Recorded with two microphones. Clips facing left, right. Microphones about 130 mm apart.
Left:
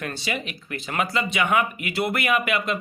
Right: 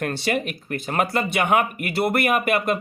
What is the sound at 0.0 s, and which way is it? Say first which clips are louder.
Speech: right 6 dB; 55° right (ahead or behind).